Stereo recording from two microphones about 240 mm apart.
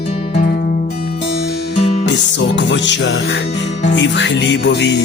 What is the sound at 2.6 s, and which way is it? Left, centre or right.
Music, left.